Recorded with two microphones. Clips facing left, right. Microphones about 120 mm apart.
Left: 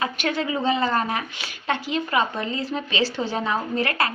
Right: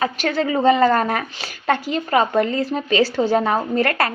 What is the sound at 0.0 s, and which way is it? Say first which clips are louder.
A woman's voice: right 5 dB; 35° right (ahead or behind).